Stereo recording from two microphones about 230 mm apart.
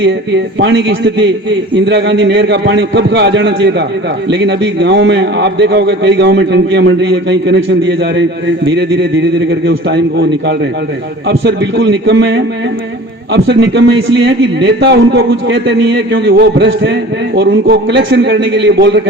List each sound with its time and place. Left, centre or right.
0.0 s a man's voice: right